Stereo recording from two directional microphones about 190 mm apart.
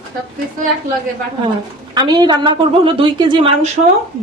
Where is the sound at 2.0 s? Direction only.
25° right (ahead or behind).